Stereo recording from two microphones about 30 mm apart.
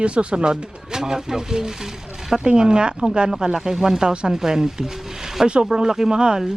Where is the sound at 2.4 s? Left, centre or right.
Right.